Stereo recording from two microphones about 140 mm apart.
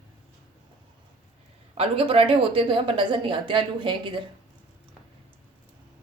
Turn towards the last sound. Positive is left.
turn(degrees=-35)  # may be behind; listen again after turning